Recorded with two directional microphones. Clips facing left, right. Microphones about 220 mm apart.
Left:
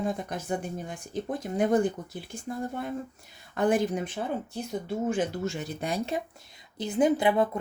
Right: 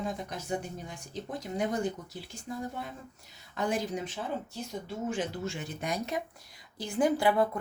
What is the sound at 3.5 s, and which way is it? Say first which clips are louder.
A woman's voice: left 7 dB; 55° left (ahead or behind).